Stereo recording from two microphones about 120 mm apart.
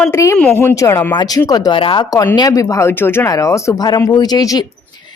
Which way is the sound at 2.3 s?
30° left (ahead or behind).